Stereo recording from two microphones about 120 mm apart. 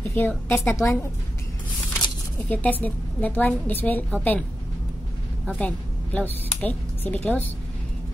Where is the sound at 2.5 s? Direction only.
15° left (ahead or behind).